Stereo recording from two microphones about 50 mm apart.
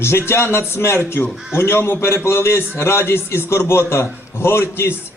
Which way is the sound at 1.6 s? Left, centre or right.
Left.